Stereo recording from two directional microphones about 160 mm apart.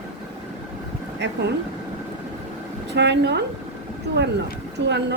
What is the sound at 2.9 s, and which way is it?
Speech, 90° right.